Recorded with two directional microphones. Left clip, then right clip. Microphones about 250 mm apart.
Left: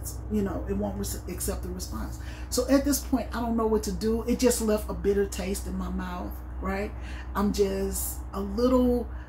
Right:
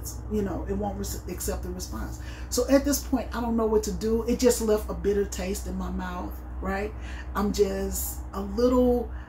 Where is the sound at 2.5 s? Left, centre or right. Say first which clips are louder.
Right 2 dB; centre.